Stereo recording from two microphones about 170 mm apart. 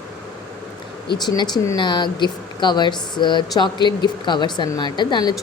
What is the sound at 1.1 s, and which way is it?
Speech, 25° left (ahead or behind).